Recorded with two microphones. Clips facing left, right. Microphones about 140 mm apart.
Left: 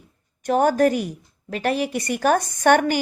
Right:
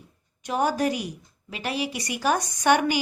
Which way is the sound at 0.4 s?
50° left (ahead or behind).